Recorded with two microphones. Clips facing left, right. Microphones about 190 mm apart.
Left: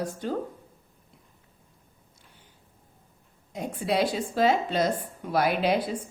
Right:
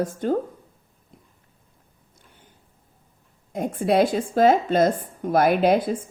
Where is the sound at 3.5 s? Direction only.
50° right (ahead or behind).